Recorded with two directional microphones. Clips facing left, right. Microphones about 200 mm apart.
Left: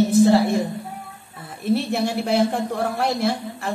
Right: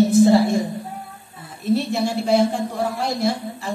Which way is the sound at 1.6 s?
55° left (ahead or behind).